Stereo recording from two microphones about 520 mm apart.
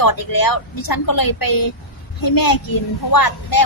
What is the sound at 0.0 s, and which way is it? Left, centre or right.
A woman's voice, left.